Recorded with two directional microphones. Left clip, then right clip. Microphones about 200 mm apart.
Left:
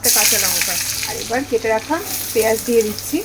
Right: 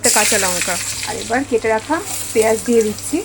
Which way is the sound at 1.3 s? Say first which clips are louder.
Right 2 dB; 25° right (ahead or behind).